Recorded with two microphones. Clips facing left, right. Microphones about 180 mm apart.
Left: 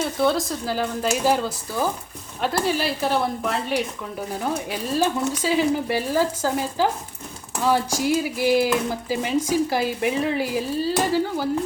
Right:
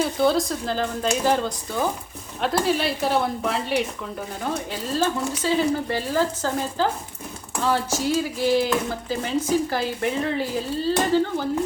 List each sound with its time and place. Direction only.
0.0 s speech: centre (ahead or behind)
4.7 s speech: 15° left (ahead or behind)